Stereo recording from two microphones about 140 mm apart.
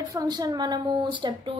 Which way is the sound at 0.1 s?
25° right (ahead or behind).